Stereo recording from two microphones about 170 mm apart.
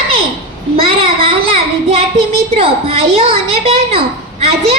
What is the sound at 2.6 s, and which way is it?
A woman's voice, 35° right (ahead or behind).